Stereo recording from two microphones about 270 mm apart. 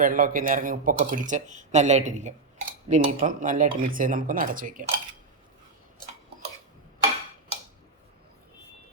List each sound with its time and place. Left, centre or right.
0.0 s speech: right